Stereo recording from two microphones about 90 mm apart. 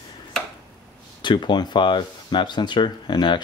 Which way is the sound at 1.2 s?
60° left (ahead or behind).